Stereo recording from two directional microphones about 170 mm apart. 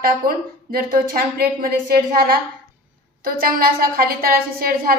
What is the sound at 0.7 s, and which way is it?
A woman's voice, 60° right (ahead or behind).